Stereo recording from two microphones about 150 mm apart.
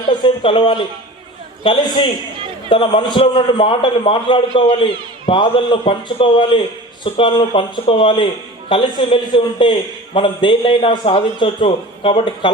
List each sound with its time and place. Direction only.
0.1 s a man's voice: 35° left (ahead or behind)